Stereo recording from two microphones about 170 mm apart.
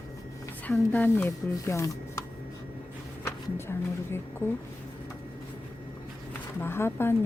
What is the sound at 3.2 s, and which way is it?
Speech, 15° left (ahead or behind).